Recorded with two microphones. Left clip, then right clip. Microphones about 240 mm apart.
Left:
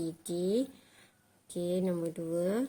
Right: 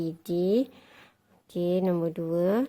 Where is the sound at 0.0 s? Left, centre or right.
Right.